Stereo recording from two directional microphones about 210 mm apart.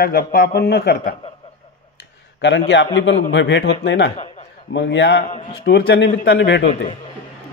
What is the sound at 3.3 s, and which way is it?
A man's voice, 55° left (ahead or behind).